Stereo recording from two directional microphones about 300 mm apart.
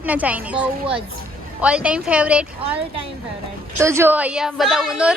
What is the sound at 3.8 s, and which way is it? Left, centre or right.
Speech, centre.